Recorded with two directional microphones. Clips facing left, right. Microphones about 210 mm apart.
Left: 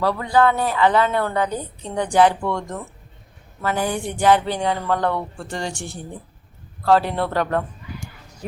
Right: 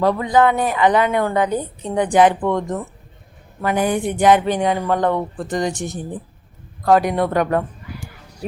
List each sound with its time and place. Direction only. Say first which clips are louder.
0.0 s a woman's voice: right 3 dB; 15° right (ahead or behind)